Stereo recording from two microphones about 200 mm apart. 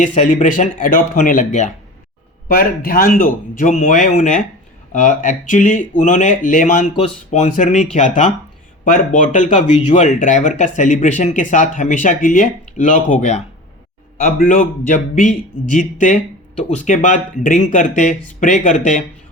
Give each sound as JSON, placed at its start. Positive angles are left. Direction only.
{"t": 0.0, "sound": "speech", "side_deg": 40}